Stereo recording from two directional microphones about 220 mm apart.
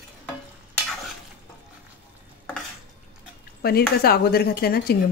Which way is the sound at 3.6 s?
45° left (ahead or behind).